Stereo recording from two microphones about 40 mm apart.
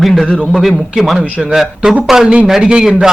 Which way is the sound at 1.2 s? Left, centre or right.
Right.